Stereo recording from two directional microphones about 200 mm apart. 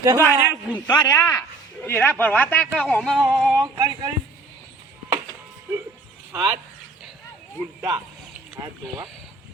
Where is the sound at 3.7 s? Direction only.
20° right (ahead or behind).